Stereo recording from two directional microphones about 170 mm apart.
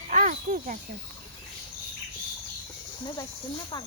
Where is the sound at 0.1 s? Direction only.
50° right (ahead or behind).